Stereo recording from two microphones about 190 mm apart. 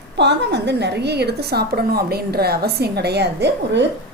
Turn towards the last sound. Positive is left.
turn(degrees=-65)  # may be behind; listen again after turning